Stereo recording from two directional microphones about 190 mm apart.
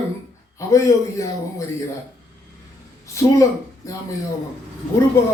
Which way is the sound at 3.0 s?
15° left (ahead or behind).